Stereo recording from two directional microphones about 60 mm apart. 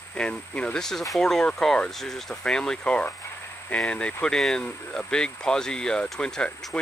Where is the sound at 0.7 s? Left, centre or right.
Centre.